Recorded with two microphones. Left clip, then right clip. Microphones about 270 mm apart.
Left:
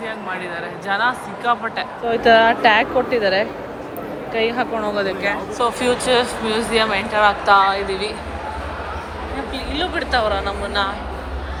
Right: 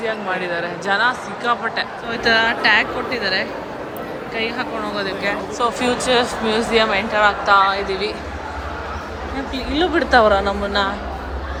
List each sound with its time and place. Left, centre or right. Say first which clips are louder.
0.0 s speech: right 4 dB; centre
9.8 s speech: right 6 dB; right